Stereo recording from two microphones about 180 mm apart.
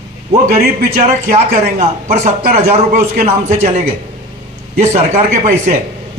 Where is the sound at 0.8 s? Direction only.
50° right (ahead or behind).